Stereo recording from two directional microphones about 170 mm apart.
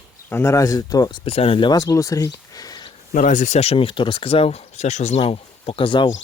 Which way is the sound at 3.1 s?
50° left (ahead or behind).